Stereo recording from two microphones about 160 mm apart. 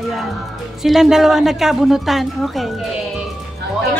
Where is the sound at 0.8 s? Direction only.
Centre (ahead or behind).